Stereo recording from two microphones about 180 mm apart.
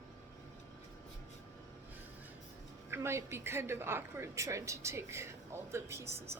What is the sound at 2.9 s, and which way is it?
A woman's voice, 15° right (ahead or behind).